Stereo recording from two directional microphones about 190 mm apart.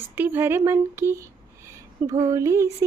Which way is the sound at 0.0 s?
10° right (ahead or behind).